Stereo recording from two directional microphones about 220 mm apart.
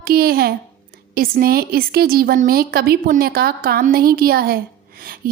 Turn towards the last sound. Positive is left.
turn(degrees=-40)  # may be behind; listen again after turning